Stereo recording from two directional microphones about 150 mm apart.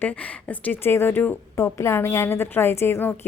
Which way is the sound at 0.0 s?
10° left (ahead or behind).